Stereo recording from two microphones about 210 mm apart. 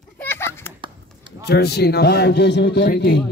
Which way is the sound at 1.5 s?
50° left (ahead or behind).